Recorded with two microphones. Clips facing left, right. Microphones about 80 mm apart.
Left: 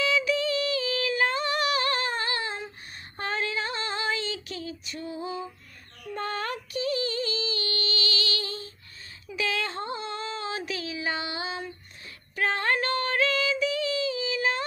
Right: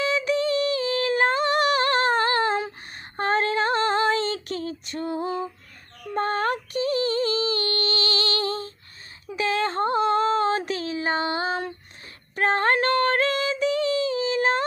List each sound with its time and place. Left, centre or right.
0.0 s singing: right
3.2 s female singing: right
9.4 s a sound: right
12.4 s female singing: right